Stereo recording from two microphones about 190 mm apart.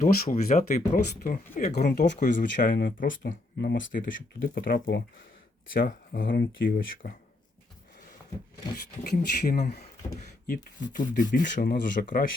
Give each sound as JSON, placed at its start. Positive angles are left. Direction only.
{"t": 0.0, "sound": "speech", "side_deg": 40}
{"t": 1.8, "sound": "speech", "side_deg": 55}
{"t": 8.7, "sound": "speech", "side_deg": 45}